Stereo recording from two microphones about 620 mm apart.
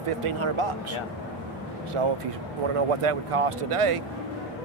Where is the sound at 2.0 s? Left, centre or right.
Right.